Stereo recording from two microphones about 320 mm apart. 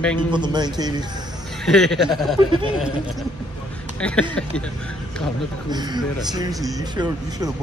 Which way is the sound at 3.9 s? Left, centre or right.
Centre.